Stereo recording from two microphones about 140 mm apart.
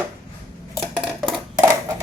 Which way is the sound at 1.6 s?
20° right (ahead or behind).